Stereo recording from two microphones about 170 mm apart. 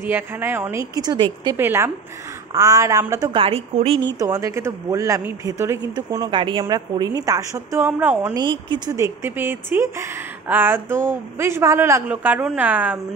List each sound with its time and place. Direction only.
0.0 s speech: 10° right (ahead or behind)
1.6 s speech: 15° right (ahead or behind)
3.3 s a woman's voice: 35° right (ahead or behind)
4.2 s speech: 20° right (ahead or behind)
8.3 s speech: 25° right (ahead or behind); by 13.0 s 10° right (ahead or behind)